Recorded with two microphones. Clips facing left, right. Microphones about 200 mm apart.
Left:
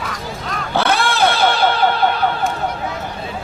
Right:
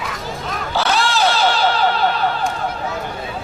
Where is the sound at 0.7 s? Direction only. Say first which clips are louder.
Left 1 dB; 55° left (ahead or behind).